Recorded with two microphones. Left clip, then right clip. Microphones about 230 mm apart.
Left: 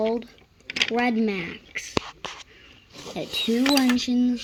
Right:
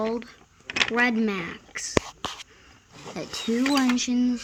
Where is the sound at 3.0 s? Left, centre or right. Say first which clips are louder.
Left 3 dB; right.